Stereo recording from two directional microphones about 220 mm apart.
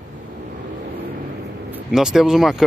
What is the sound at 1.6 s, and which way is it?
Speech, 5° right (ahead or behind).